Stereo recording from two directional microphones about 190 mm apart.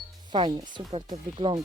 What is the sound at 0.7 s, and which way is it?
Speech, 20° right (ahead or behind).